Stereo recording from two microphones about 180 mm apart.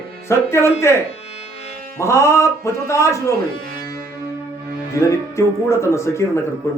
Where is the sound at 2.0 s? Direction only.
15° left (ahead or behind).